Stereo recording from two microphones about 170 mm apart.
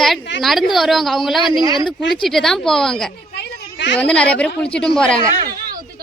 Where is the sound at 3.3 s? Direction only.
90° left.